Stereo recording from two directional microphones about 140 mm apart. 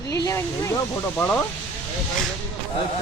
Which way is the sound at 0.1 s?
20° left (ahead or behind).